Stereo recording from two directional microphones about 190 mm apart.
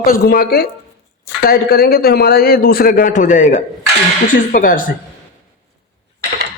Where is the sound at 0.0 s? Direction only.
55° left (ahead or behind).